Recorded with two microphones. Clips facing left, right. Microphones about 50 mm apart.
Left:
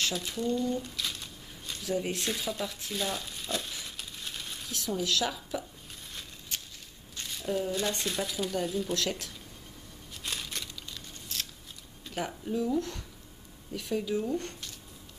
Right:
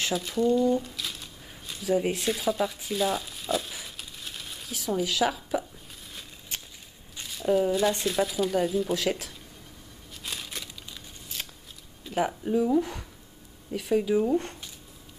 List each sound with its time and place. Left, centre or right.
0.1 s speech: centre
0.7 s a sound: centre
2.0 s speech: centre
7.2 s a sound: centre
7.7 s speech: centre
10.2 s crumpling: centre
12.1 s speech: centre